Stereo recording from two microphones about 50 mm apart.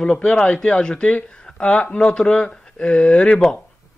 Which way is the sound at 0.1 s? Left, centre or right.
Left.